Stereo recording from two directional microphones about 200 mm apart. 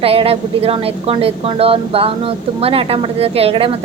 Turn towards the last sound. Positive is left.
turn(degrees=-30)  # may be behind; listen again after turning